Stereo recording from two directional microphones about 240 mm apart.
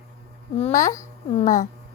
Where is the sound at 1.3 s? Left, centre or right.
Left.